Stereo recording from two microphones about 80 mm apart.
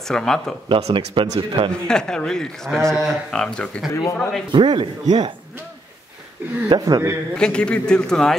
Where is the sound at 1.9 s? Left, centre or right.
Centre.